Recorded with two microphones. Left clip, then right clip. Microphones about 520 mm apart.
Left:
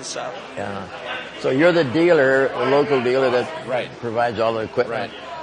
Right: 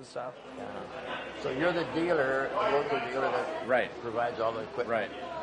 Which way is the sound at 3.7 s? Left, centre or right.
Left.